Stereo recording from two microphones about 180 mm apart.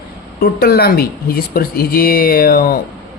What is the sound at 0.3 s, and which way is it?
A man's voice, 60° left (ahead or behind).